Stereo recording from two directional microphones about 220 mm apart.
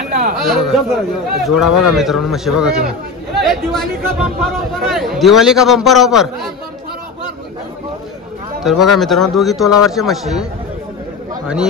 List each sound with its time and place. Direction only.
0.1 s speech: 40° right (ahead or behind)
0.7 s speech: centre (ahead or behind)
8.6 s speech: centre (ahead or behind)
11.4 s speech: 5° right (ahead or behind)